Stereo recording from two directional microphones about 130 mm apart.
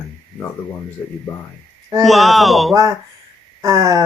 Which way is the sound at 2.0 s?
Centre (ahead or behind).